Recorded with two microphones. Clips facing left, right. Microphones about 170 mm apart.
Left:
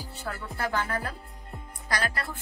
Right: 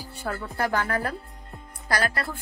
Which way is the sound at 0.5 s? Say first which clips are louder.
Right 4 dB; 75° right (ahead or behind).